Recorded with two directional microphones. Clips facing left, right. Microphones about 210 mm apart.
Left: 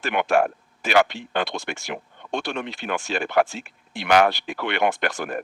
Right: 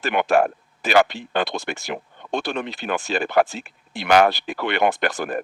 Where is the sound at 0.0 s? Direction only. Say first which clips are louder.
Right 2 dB; 35° right (ahead or behind).